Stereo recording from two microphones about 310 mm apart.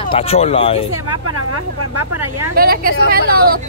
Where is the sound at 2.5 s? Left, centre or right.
Right.